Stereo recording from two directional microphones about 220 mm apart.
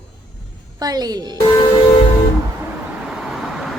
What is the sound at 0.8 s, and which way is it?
Speech, 15° right (ahead or behind).